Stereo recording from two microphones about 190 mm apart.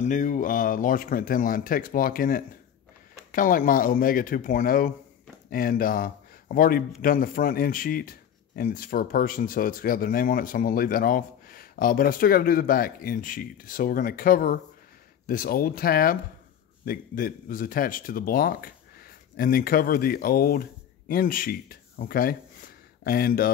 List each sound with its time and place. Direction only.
0.0 s speech: 40° left (ahead or behind)